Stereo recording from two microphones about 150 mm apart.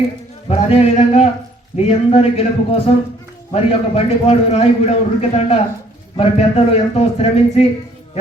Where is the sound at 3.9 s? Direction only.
40° left (ahead or behind).